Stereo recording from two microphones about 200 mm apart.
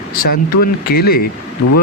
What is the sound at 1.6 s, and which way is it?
Speech, 90° left.